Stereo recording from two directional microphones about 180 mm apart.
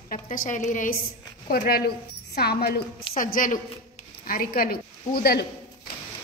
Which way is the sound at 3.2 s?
50° left (ahead or behind).